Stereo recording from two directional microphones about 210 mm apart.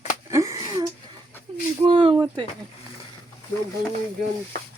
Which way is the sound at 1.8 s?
25° right (ahead or behind).